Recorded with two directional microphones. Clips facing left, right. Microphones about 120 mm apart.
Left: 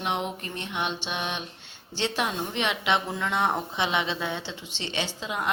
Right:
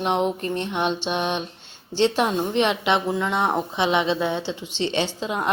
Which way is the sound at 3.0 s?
15° right (ahead or behind).